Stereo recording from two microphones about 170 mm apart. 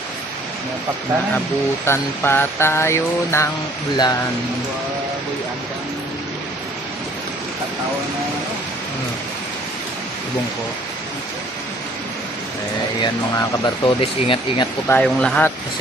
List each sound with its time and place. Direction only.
1.8 s mantra: 15° left (ahead or behind)
3.9 s speech: 25° left (ahead or behind)
13.0 s mantra: 15° left (ahead or behind)
14.0 s speech: 25° left (ahead or behind)
14.8 s mantra: 10° left (ahead or behind)